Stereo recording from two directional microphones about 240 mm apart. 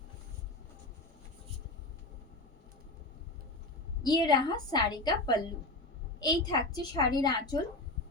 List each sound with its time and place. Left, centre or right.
4.0 s a woman's voice: centre